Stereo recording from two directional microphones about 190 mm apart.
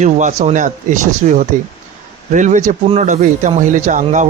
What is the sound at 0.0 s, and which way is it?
Speech, 40° right (ahead or behind).